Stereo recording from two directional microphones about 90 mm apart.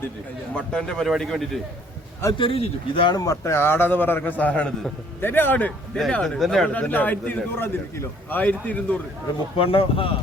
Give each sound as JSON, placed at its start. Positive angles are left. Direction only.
{"t": 0.5, "sound": "a man's voice", "side_deg": 10}
{"t": 2.4, "sound": "speech", "side_deg": 80}
{"t": 3.2, "sound": "a man's voice", "side_deg": 35}
{"t": 6.7, "sound": "a man's voice", "side_deg": 20}
{"t": 9.6, "sound": "speech", "side_deg": 90}